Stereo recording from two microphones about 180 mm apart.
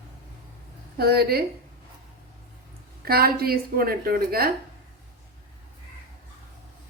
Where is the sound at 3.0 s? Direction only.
55° right (ahead or behind).